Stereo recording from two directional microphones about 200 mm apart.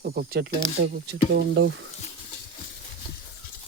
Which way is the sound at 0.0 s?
50° right (ahead or behind).